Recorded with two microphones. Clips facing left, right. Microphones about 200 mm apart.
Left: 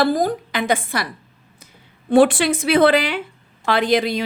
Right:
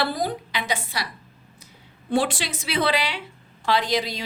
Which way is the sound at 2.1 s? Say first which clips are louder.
Left 10 dB; 55° left (ahead or behind).